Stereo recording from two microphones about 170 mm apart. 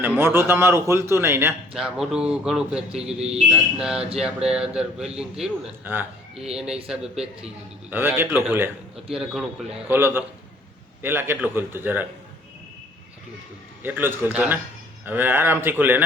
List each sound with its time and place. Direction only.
0.2 s a man's voice: 15° right (ahead or behind)
1.7 s a man's voice: centre (ahead or behind)
3.2 s speech: 35° right (ahead or behind)
3.5 s a man's voice: 5° right (ahead or behind)
9.1 s a man's voice: 5° right (ahead or behind)
13.8 s a man's voice: 10° right (ahead or behind)